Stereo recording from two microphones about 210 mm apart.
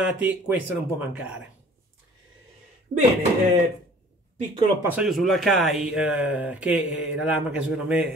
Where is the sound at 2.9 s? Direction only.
35° right (ahead or behind).